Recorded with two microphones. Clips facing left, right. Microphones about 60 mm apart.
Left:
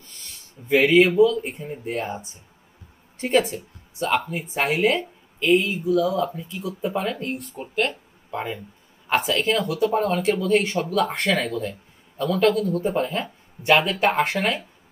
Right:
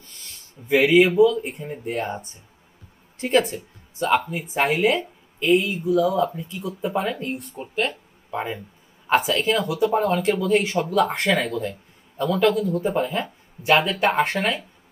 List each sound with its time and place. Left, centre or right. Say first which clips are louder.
0.7 s speech: even; centre
10.2 s speech: even; centre
12.8 s speech: right 1 dB; centre